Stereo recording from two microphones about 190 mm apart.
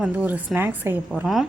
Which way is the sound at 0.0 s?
5° right (ahead or behind).